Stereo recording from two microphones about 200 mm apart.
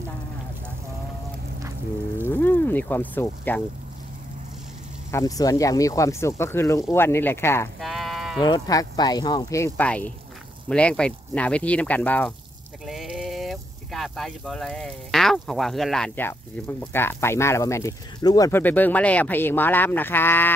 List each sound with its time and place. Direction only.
2.2 s speech: 10° left (ahead or behind)
5.1 s speech: 15° left (ahead or behind)
7.8 s livestock: centre (ahead or behind)
8.4 s speech: 20° left (ahead or behind)